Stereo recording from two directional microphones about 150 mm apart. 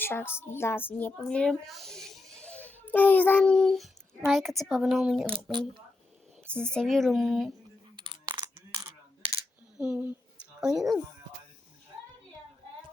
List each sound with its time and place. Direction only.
0.0 s a child's voice: 15° left (ahead or behind); by 5.3 s centre (ahead or behind)
5.3 s speech: 35° right (ahead or behind)
6.5 s speech: 5° left (ahead or behind)
7.9 s a sound: 30° right (ahead or behind)
9.8 s speech: 10° right (ahead or behind)